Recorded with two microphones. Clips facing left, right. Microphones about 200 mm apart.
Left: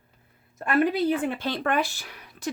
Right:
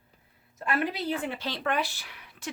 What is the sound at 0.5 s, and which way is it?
Speech, 50° left (ahead or behind).